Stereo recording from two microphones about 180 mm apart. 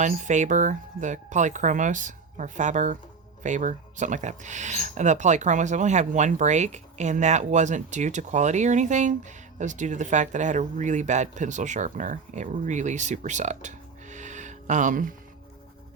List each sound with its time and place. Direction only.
0.0 s speech: 45° right (ahead or behind)